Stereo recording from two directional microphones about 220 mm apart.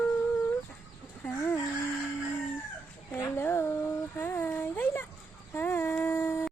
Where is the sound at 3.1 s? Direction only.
10° left (ahead or behind).